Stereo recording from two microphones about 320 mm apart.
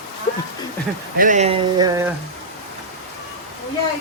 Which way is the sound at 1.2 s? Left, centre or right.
Right.